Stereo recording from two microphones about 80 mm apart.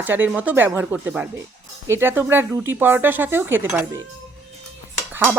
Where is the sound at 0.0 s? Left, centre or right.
Right.